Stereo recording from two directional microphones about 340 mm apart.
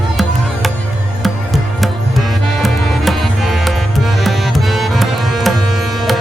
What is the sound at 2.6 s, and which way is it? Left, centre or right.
Music, centre.